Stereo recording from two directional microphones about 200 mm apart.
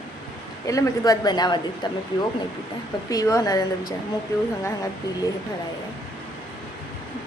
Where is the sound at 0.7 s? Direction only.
20° left (ahead or behind).